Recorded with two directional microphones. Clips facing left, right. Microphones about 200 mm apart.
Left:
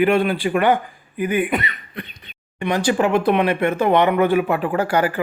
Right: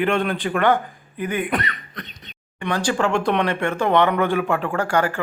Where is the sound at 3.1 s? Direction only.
5° left (ahead or behind).